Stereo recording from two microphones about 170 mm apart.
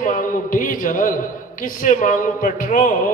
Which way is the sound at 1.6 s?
50° left (ahead or behind).